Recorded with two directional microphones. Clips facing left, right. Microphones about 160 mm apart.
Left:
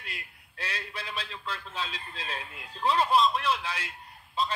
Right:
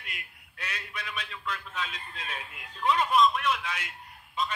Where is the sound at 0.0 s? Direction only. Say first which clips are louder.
Left 1 dB; 30° left (ahead or behind).